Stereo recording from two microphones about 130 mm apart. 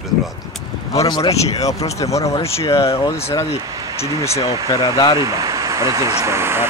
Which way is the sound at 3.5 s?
50° left (ahead or behind).